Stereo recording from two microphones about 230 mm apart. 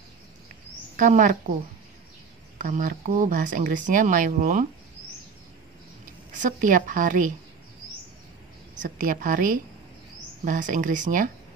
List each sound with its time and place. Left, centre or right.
0.9 s speech: right
2.6 s speech: right
6.3 s speech: right
8.7 s speech: right